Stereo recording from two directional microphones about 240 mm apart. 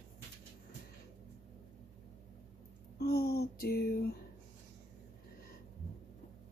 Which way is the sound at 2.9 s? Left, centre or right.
Left.